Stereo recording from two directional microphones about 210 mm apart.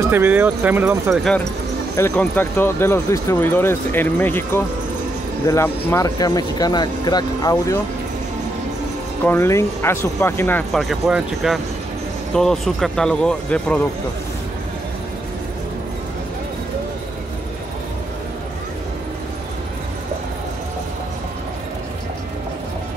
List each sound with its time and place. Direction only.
0.0 s speech: 10° right (ahead or behind)
2.0 s speech: 10° left (ahead or behind)
9.2 s speech: 10° left (ahead or behind)
10.7 s speech: centre (ahead or behind)